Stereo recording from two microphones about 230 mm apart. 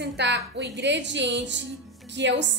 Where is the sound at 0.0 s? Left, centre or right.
Right.